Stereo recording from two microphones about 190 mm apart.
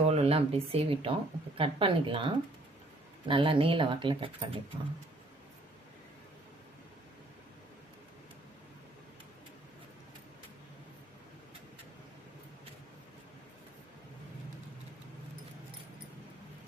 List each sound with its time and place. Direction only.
0.0 s speech: 35° right (ahead or behind)